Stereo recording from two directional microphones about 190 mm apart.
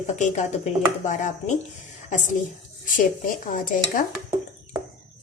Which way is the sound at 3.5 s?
45° left (ahead or behind).